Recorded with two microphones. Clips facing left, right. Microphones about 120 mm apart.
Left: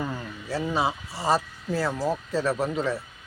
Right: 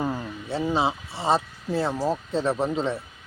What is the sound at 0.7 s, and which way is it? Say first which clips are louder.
Speech: right 2 dB; 25° right (ahead or behind).